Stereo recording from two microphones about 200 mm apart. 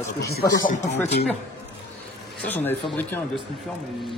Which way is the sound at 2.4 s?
10° left (ahead or behind).